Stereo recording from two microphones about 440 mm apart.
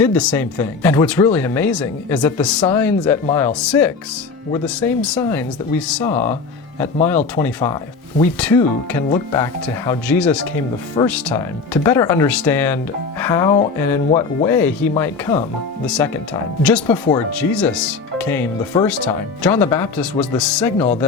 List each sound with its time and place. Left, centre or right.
0.0 s speech: centre
9.0 s speech: centre
9.4 s speech: centre